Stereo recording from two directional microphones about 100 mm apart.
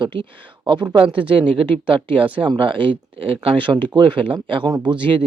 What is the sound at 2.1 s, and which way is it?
Speech, 60° right (ahead or behind).